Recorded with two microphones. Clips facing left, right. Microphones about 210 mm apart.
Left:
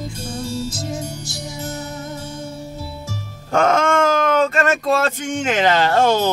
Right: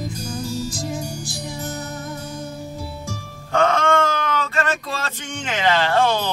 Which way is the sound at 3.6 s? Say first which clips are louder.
Left 2 dB; 45° left (ahead or behind).